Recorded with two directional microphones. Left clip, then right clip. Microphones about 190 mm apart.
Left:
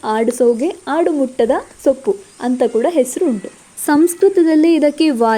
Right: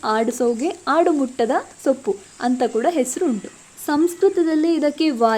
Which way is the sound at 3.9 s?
30° left (ahead or behind).